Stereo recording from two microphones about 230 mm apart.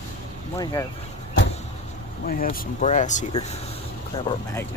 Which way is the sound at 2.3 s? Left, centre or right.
Left.